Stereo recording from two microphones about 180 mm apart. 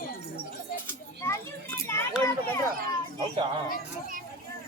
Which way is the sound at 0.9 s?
15° left (ahead or behind).